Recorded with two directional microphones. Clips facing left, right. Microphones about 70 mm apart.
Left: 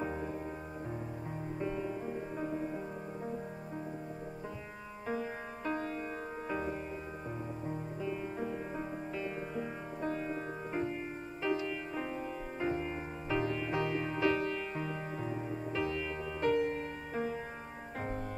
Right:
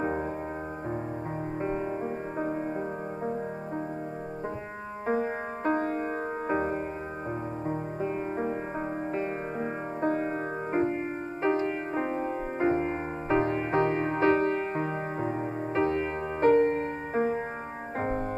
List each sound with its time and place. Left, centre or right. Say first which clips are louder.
0.0 s music: right 8 dB; right
1.6 s music: right 6 dB; right
5.0 s music: right 9 dB; right